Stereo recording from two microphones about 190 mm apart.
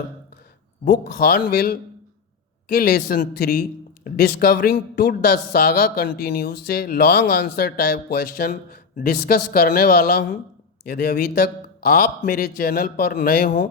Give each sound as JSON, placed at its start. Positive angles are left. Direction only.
{"t": 0.9, "sound": "a man's voice", "side_deg": 55}